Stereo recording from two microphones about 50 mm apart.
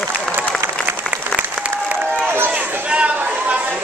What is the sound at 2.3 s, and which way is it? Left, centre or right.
Run, right.